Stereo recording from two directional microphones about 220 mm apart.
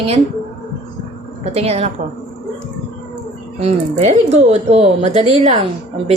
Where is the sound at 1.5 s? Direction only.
30° right (ahead or behind).